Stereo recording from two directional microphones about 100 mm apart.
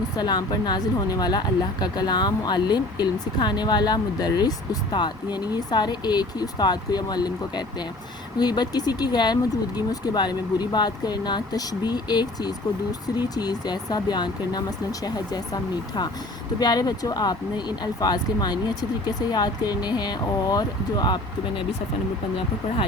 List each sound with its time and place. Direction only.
0.2 s a woman's voice: 45° left (ahead or behind)